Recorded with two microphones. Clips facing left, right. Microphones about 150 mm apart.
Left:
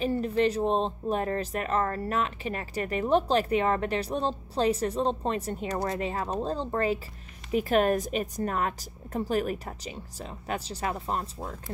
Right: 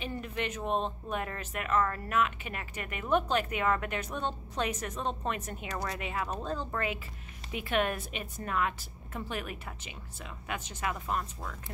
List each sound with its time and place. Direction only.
0.0 s speech: 35° left (ahead or behind)